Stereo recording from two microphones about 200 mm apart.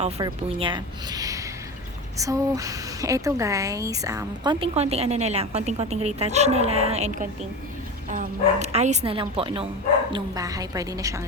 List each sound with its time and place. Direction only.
0.2 s speech: 25° right (ahead or behind)
4.6 s speech: 30° right (ahead or behind); by 11.2 s 15° right (ahead or behind)